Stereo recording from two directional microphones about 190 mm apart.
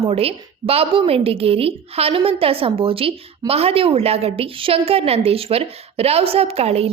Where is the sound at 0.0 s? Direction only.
30° right (ahead or behind).